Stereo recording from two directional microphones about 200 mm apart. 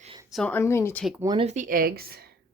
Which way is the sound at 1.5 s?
40° right (ahead or behind).